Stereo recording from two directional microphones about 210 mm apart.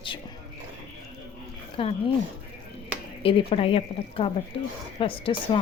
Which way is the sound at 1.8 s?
25° left (ahead or behind).